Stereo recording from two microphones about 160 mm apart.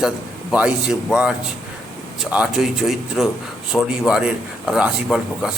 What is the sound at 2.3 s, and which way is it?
A man's voice, 5° right (ahead or behind).